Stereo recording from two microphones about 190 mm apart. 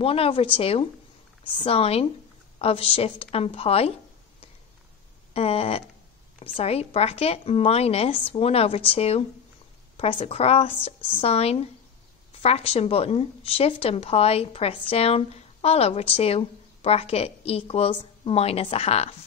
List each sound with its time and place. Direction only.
0.0 s a woman's voice: 30° left (ahead or behind)
5.3 s a woman's voice: 30° left (ahead or behind)